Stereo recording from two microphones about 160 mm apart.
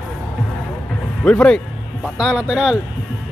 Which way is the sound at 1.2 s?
5° left (ahead or behind).